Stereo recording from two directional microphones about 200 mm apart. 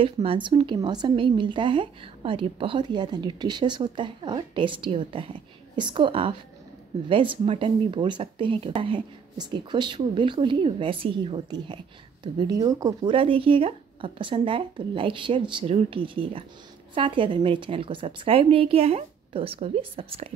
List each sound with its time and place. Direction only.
0.0 s speech: 25° right (ahead or behind)